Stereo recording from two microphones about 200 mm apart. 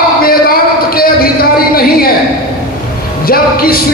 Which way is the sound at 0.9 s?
50° left (ahead or behind).